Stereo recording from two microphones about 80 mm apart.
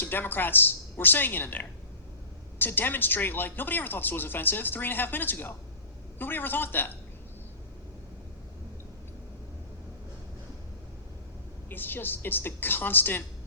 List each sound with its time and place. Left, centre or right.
0.0 s speech: left
11.7 s speech: left